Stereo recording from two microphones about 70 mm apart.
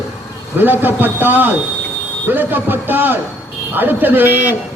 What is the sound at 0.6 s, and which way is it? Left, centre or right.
A man's voice, right.